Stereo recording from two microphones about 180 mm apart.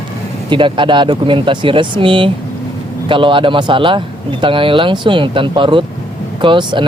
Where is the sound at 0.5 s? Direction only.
25° right (ahead or behind).